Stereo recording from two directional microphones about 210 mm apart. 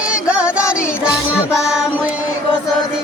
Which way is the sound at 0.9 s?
10° left (ahead or behind).